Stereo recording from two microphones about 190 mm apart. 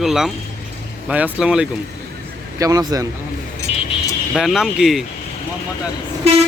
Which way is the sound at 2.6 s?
20° right (ahead or behind).